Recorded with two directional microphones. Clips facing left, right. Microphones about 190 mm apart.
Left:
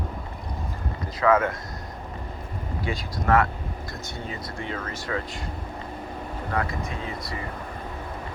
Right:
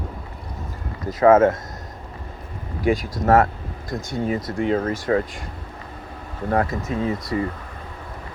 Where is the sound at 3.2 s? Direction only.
40° right (ahead or behind).